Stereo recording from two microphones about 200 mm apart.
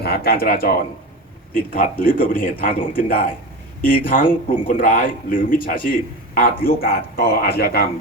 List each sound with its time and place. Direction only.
0.0 s a man's voice: 50° left (ahead or behind)